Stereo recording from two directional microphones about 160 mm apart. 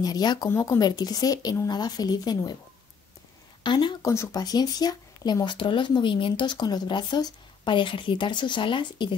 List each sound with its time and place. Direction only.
0.0 s speech: 25° left (ahead or behind)
3.6 s speech: 30° left (ahead or behind)